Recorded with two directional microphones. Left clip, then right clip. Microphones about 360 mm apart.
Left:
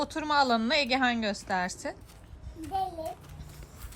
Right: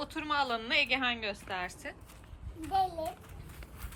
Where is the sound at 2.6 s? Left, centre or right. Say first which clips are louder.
Right 1 dB; centre.